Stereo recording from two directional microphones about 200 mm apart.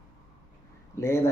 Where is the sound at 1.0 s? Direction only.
15° left (ahead or behind).